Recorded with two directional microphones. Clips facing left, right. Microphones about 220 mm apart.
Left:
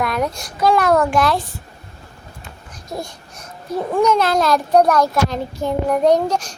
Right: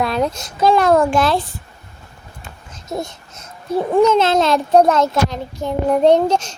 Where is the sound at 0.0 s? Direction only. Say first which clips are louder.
Right 2 dB; 25° right (ahead or behind).